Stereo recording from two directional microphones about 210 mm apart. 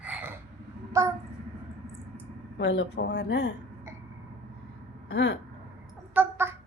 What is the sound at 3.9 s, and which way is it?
Hiccup, 15° right (ahead or behind).